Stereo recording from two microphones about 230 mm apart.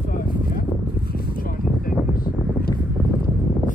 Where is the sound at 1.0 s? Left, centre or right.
Left.